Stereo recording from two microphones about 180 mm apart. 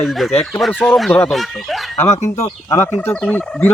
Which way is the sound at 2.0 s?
40° left (ahead or behind).